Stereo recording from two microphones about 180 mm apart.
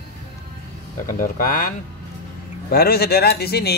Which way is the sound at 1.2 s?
50° left (ahead or behind).